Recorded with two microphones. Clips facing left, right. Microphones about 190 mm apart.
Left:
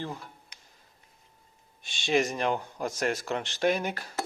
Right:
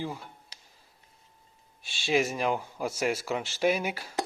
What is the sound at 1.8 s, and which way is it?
Speech, 5° right (ahead or behind).